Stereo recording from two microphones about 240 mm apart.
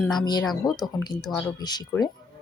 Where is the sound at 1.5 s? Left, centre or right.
Centre.